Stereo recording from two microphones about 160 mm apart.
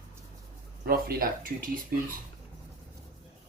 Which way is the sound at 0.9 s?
70° right (ahead or behind).